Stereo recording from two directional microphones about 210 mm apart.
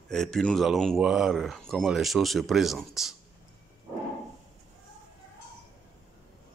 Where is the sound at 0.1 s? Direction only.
5° left (ahead or behind).